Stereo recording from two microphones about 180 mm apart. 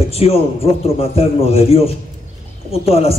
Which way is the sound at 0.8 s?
35° left (ahead or behind).